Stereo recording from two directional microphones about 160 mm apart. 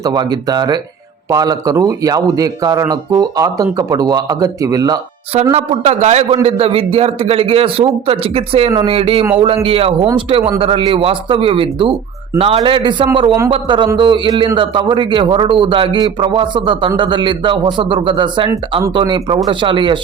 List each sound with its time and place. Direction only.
0.0 s speech: 25° right (ahead or behind)
5.3 s a man's voice: 40° right (ahead or behind)